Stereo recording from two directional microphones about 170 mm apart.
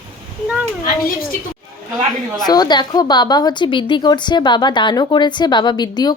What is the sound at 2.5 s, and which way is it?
A woman's voice, 25° left (ahead or behind).